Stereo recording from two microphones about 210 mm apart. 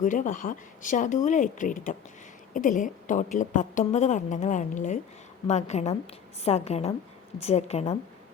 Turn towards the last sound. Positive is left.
turn(degrees=30)  # may be behind; listen again after turning